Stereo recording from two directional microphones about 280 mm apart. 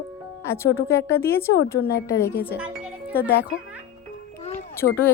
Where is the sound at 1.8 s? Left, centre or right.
Left.